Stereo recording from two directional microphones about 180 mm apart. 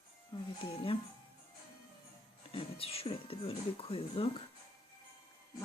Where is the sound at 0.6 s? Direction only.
30° left (ahead or behind).